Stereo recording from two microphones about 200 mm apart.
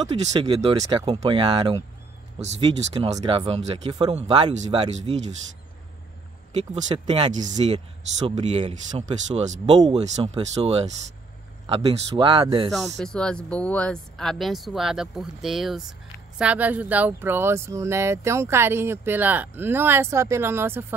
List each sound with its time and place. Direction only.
0.1 s speech: 25° right (ahead or behind)
6.6 s speech: 30° right (ahead or behind)
12.7 s speech: centre (ahead or behind)